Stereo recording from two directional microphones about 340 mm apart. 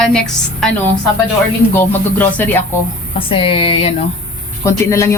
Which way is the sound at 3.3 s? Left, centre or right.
Centre.